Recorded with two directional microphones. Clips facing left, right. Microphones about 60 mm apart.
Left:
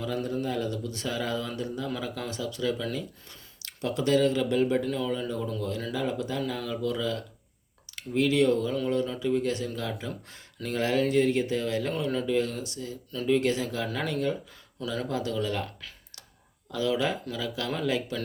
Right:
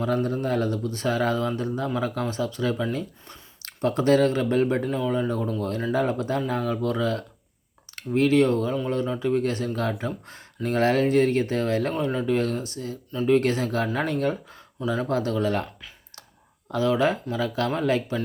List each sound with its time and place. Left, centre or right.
0.0 s speech: right
15.0 s speech: right
16.7 s speech: right